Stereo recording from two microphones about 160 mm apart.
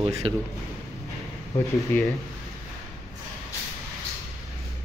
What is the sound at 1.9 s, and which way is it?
Speech, 15° left (ahead or behind).